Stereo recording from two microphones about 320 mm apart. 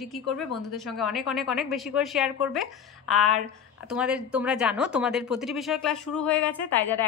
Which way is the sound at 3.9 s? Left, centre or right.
Centre.